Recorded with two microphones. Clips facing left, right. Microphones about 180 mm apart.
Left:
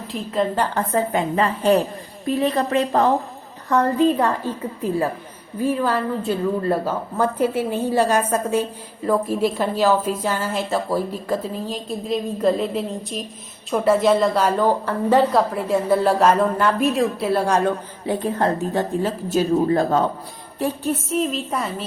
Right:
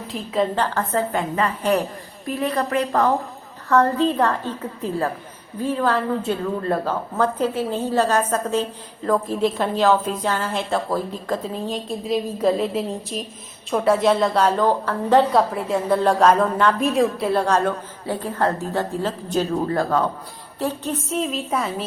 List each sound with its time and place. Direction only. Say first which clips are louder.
0.1 s a woman's voice: even; centre (ahead or behind)
0.6 s a woman's voice: left 1 dB; 15° left (ahead or behind)
1.4 s a woman's voice: left 3 dB; 30° left (ahead or behind)
3.7 s a woman's voice: left 1 dB; 15° left (ahead or behind)
19.7 s a woman's voice: left 2 dB; 20° left (ahead or behind)
20.6 s a woman's voice: left 2 dB; 10° left (ahead or behind)